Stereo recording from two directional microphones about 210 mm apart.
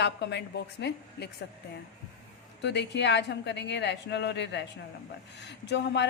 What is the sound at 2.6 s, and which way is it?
A man's voice, 55° left (ahead or behind).